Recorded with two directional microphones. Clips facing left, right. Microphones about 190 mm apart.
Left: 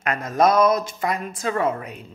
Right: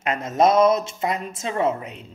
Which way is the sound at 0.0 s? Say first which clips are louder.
Even; 25° right (ahead or behind).